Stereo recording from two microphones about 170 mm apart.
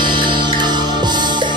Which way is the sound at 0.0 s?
30° right (ahead or behind).